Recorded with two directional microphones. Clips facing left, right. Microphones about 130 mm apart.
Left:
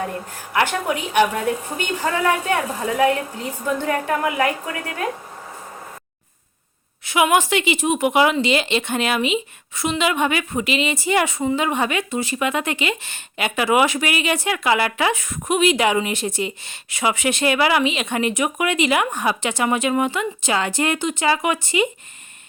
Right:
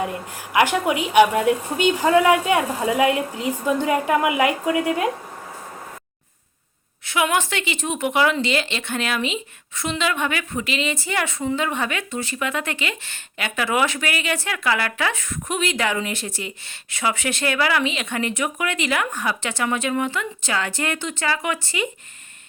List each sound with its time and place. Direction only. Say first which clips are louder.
0.5 s a woman's voice: right 2 dB; 10° right (ahead or behind)
7.0 s a woman's voice: left 4 dB; 10° left (ahead or behind)